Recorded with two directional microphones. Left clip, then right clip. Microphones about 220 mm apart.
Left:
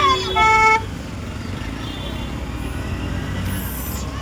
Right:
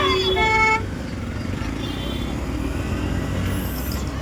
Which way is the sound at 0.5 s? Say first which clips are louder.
Left 5 dB; 20° left (ahead or behind).